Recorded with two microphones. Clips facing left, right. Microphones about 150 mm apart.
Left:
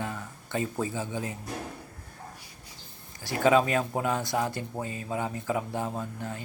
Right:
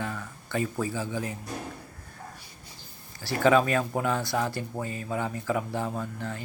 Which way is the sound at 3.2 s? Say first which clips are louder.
Right 1 dB; 15° left (ahead or behind).